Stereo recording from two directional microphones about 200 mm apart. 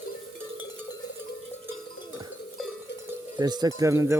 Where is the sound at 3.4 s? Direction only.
20° right (ahead or behind).